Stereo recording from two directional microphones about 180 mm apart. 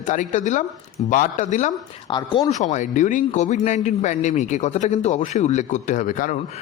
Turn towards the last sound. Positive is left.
turn(degrees=45)  # may be behind; listen again after turning